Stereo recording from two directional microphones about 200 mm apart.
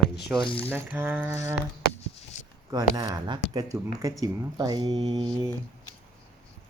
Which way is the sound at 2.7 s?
20° right (ahead or behind).